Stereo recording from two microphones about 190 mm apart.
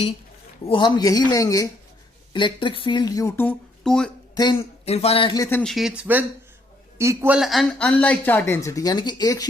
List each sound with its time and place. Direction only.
0.7 s speech: 25° left (ahead or behind); by 4.1 s 5° left (ahead or behind)
4.4 s speech: 20° left (ahead or behind)
4.9 s speech: 35° left (ahead or behind)